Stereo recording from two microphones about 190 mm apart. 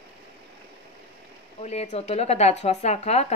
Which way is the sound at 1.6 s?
35° left (ahead or behind).